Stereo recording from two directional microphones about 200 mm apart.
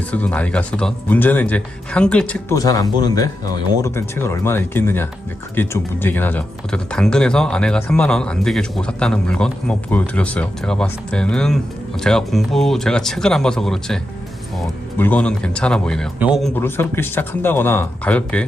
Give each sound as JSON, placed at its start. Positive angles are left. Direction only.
{"t": 0.1, "sound": "speech", "side_deg": 5}
{"t": 16.6, "sound": "speech", "side_deg": 10}